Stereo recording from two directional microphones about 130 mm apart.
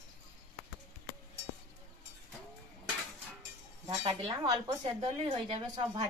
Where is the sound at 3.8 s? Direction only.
40° right (ahead or behind).